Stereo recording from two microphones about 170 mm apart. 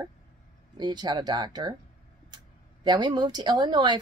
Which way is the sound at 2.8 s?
25° right (ahead or behind).